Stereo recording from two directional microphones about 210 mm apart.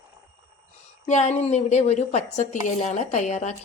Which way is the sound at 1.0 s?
30° left (ahead or behind).